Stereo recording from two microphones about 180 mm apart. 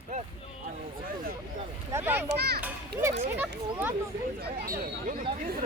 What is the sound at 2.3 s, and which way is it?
Speech, 65° right (ahead or behind).